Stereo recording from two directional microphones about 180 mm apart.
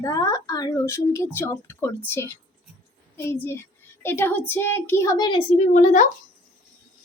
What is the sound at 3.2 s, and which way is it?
A woman's voice, 10° left (ahead or behind).